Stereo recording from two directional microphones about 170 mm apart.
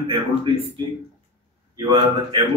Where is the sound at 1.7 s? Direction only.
25° right (ahead or behind).